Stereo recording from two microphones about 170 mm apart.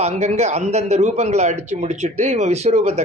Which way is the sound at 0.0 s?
40° right (ahead or behind).